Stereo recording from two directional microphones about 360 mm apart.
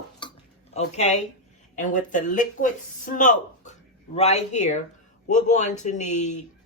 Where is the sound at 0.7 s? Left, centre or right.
Centre.